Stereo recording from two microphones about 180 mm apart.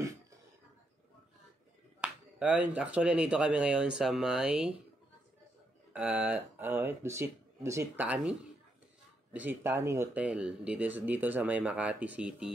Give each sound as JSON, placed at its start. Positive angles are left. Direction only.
{"t": 2.0, "sound": "speech", "side_deg": -5}
{"t": 5.9, "sound": "speech", "side_deg": -5}